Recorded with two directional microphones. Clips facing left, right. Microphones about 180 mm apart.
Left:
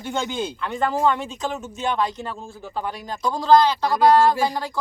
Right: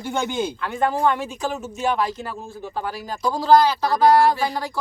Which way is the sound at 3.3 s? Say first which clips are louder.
Even; 10° right (ahead or behind).